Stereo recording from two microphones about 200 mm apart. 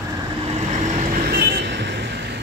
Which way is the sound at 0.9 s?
45° right (ahead or behind).